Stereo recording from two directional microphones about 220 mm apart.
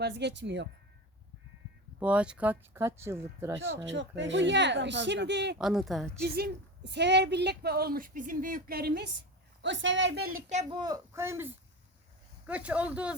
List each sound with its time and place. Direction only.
0.0 s a woman's voice: 50° right (ahead or behind)
2.0 s speech: 5° right (ahead or behind)
3.8 s a woman's voice: 55° right (ahead or behind)
5.5 s speech: centre (ahead or behind)
6.2 s a woman's voice: 45° right (ahead or behind)
9.6 s a woman's voice: 55° right (ahead or behind)
10.5 s speech: 25° right (ahead or behind); by 13.1 s 5° right (ahead or behind)